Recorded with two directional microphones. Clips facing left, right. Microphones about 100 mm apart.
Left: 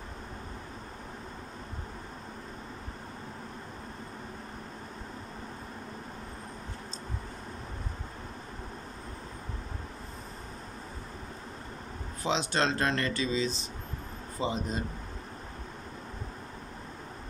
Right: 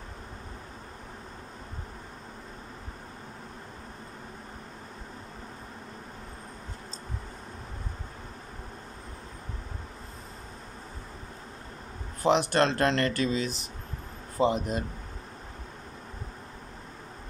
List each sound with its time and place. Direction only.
12.2 s speech: 55° right (ahead or behind)